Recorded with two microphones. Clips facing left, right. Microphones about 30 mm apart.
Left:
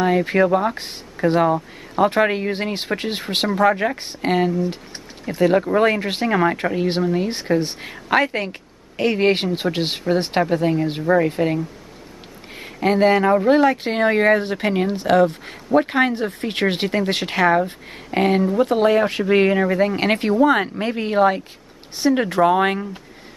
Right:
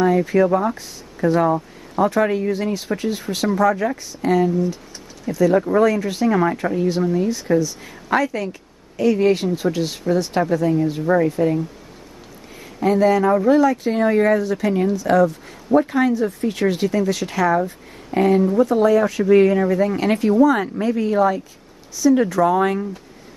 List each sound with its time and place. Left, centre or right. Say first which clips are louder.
0.0 s speech: right 1 dB; left
12.5 s speech: even; left